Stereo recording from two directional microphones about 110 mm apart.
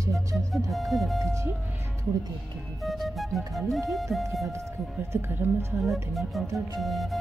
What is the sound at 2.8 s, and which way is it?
Music, centre (ahead or behind).